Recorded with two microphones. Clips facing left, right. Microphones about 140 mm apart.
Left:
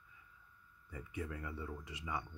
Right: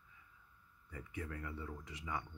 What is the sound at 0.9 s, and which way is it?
Speech, 10° left (ahead or behind).